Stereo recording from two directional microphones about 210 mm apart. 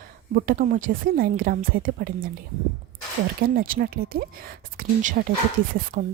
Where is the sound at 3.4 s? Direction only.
45° right (ahead or behind).